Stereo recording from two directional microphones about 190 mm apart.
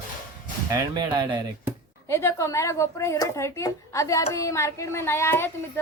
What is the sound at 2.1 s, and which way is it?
Speech, 15° left (ahead or behind).